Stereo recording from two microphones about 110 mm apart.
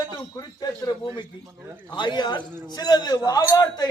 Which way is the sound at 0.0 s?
35° left (ahead or behind).